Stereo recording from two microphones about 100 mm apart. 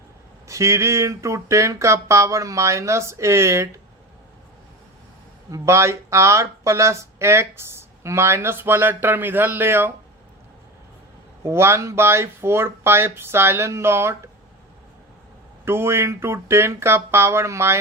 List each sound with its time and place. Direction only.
0.4 s speech: 30° right (ahead or behind)
5.5 s speech: 30° right (ahead or behind)
11.4 s speech: 25° right (ahead or behind)
15.6 s speech: 25° right (ahead or behind)